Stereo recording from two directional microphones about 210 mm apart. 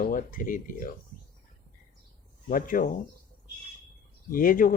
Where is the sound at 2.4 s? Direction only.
40° left (ahead or behind).